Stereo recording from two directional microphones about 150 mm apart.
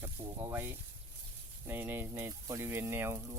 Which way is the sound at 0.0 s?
15° right (ahead or behind).